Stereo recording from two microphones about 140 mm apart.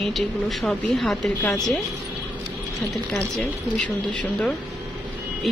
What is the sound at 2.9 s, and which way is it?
A woman's voice, centre (ahead or behind).